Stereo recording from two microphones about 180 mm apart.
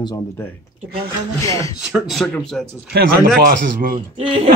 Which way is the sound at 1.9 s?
Centre (ahead or behind).